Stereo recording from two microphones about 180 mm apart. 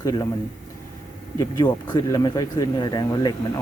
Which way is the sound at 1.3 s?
25° left (ahead or behind).